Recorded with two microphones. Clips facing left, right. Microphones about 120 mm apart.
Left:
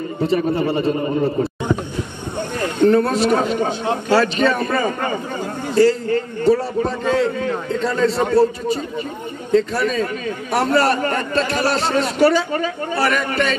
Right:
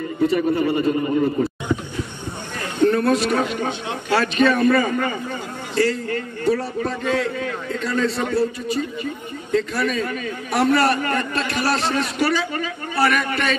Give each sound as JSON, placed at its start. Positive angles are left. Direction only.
{"t": 0.2, "sound": "a man's voice", "side_deg": 30}
{"t": 2.6, "sound": "a man's voice", "side_deg": 30}